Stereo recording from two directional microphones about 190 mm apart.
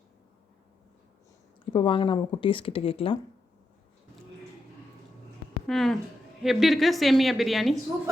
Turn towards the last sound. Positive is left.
turn(degrees=0)  # may be behind; listen again after turning